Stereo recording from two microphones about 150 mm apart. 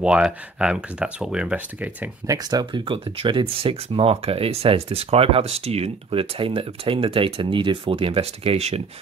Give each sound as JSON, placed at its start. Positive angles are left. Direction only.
{"t": 0.0, "sound": "speech", "side_deg": -5}
{"t": 2.2, "sound": "speech", "side_deg": -25}